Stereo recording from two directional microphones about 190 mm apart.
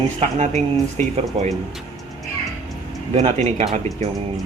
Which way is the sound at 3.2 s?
35° right (ahead or behind).